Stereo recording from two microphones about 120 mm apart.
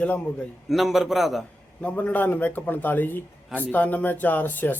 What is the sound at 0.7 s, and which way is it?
Speech, centre (ahead or behind).